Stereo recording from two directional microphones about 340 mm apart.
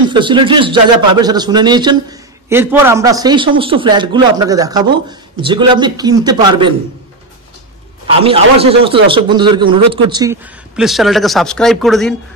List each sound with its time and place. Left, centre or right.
0.1 s a man's voice: centre
8.1 s a man's voice: centre